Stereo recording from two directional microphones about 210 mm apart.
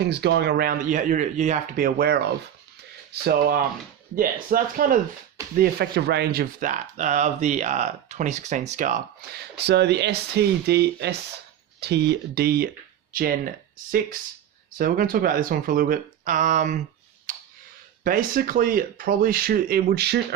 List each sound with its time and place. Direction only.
0.0 s speech: 55° right (ahead or behind); by 9.0 s 35° right (ahead or behind)
9.4 s speech: 50° right (ahead or behind)
14.8 s speech: 45° right (ahead or behind)
17.3 s a sound: 40° right (ahead or behind)
18.0 s speech: 40° right (ahead or behind)